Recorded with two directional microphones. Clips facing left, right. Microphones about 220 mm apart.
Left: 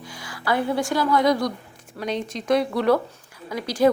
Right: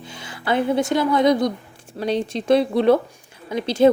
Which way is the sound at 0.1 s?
25° right (ahead or behind).